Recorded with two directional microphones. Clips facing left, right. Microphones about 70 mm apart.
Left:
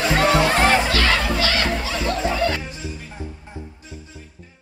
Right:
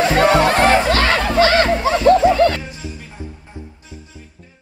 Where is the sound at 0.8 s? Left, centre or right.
Right.